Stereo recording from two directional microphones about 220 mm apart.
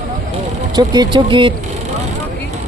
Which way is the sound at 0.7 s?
20° right (ahead or behind).